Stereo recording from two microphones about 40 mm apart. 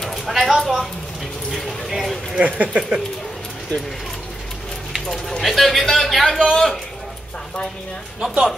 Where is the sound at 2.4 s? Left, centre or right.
Right.